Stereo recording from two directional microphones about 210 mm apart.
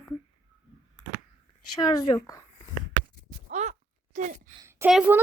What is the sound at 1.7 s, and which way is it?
Speech, 20° left (ahead or behind).